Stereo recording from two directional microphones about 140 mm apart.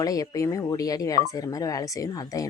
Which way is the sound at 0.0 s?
25° left (ahead or behind).